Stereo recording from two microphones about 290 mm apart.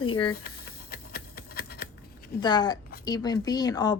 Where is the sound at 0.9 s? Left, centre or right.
Left.